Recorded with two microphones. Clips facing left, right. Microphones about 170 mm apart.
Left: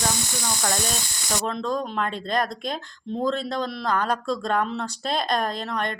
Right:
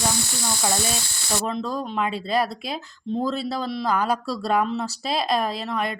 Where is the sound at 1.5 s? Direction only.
5° right (ahead or behind).